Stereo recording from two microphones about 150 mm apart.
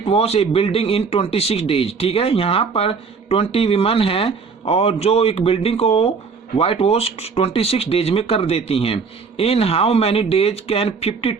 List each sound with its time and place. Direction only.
0.0 s speech: 40° left (ahead or behind)